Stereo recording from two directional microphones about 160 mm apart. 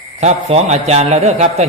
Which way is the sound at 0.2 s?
40° right (ahead or behind).